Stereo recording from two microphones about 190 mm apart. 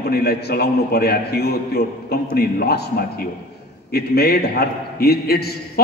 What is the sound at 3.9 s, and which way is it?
A man's voice, 55° left (ahead or behind).